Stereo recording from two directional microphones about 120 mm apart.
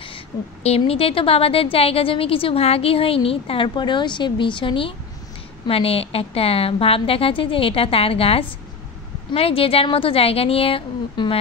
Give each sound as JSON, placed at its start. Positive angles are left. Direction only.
{"t": 0.3, "sound": "a woman's voice", "side_deg": 35}
{"t": 0.7, "sound": "a woman's voice", "side_deg": 55}